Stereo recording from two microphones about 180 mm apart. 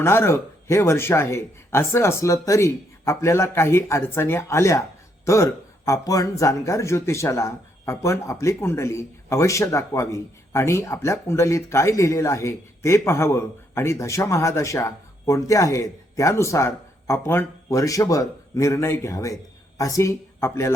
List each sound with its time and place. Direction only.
0.0 s a man's voice: 15° left (ahead or behind)